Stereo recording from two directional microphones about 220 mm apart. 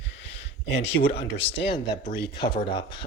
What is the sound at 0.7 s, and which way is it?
Speech, 25° left (ahead or behind).